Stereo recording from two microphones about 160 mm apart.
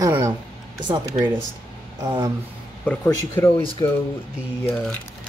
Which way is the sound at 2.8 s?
10° left (ahead or behind).